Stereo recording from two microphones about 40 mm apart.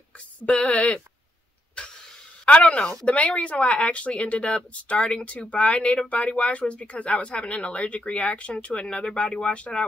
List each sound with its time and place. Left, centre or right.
0.5 s speech: left
2.4 s speech: left
3.1 s speech: left